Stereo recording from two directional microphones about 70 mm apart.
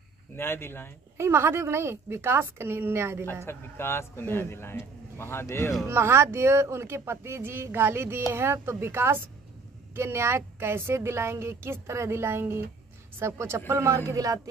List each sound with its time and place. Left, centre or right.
0.4 s a man's voice: left
1.1 s speech: right
3.4 s a man's voice: left
5.9 s speech: right